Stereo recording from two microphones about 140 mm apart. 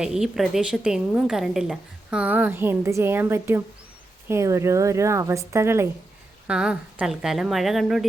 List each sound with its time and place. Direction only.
0.0 s a woman's voice: 5° right (ahead or behind)
6.5 s a woman's voice: 5° right (ahead or behind)